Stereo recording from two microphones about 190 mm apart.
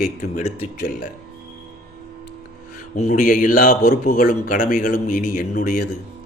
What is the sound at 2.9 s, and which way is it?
A man's voice, 40° left (ahead or behind).